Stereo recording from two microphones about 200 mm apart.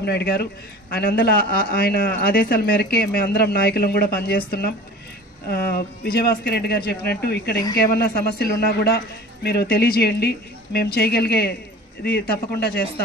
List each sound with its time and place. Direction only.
0.0 s speech: 55° left (ahead or behind)
6.0 s speech: 55° left (ahead or behind)